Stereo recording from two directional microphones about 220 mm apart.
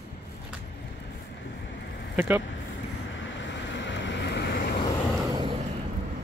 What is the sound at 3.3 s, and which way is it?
Vehicle, 55° left (ahead or behind).